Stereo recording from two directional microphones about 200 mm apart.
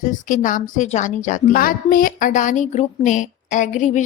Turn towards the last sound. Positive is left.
turn(degrees=35)  # may be behind; listen again after turning